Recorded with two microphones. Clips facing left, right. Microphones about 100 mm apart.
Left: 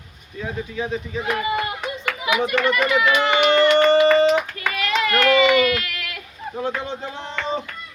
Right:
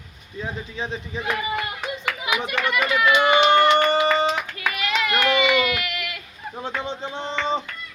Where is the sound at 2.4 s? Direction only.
20° right (ahead or behind).